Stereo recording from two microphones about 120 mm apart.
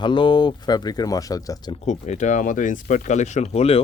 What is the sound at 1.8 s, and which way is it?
Speech, 70° left (ahead or behind).